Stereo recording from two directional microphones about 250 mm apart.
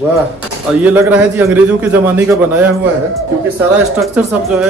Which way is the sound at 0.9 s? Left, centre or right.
Centre.